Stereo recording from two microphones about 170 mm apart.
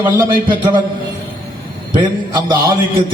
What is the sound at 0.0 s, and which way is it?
Speech, 25° right (ahead or behind).